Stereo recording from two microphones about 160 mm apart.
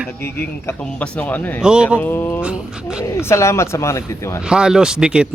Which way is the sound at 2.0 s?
10° left (ahead or behind).